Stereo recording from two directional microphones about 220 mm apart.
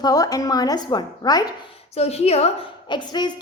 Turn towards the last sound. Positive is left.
turn(degrees=20)  # may be behind; listen again after turning